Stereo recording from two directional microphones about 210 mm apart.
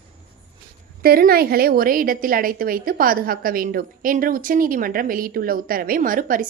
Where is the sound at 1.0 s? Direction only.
45° right (ahead or behind).